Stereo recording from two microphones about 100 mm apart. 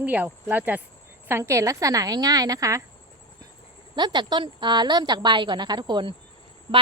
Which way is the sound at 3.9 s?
45° right (ahead or behind).